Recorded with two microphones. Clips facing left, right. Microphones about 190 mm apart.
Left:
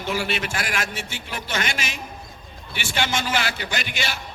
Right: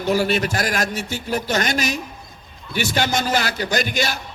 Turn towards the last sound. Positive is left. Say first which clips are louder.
# right 7 dB
turn(degrees=-40)  # may be behind; listen again after turning